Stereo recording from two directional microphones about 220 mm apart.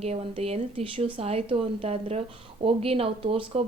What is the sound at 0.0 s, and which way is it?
Speech, 25° right (ahead or behind).